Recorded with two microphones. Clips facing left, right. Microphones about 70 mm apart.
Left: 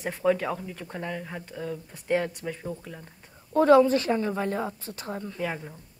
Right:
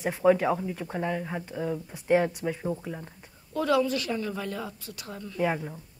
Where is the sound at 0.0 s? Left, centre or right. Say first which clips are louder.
Right 3 dB; centre.